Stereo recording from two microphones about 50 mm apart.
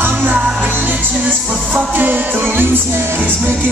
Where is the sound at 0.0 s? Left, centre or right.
Right.